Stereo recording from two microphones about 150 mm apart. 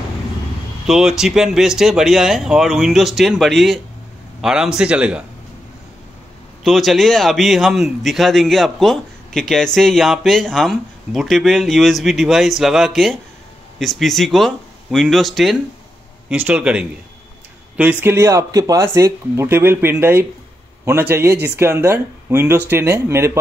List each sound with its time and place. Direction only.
0.8 s speech: 5° right (ahead or behind)
6.6 s speech: centre (ahead or behind)
16.3 s speech: 10° right (ahead or behind)
18.0 s speech: 15° right (ahead or behind)